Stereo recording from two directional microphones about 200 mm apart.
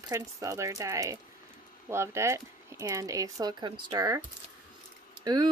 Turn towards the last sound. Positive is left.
turn(degrees=-20)  # may be behind; listen again after turning